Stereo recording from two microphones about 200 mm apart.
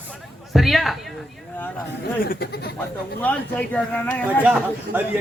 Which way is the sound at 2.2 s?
45° left (ahead or behind).